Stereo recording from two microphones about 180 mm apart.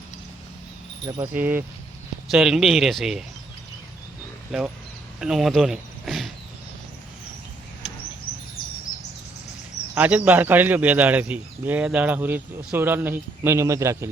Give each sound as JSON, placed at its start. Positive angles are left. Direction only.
{"t": 1.0, "sound": "speech", "side_deg": -25}
{"t": 1.3, "sound": "speech", "side_deg": -10}
{"t": 4.5, "sound": "speech", "side_deg": 0}
{"t": 9.9, "sound": "speech", "side_deg": -10}